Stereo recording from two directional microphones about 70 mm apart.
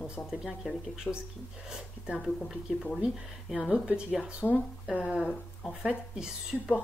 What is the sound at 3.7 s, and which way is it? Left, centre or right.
Speech, centre.